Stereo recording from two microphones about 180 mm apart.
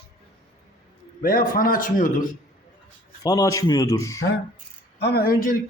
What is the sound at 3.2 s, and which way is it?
Speech, 20° left (ahead or behind).